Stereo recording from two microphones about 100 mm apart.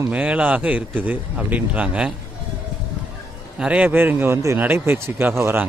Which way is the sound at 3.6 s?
15° right (ahead or behind).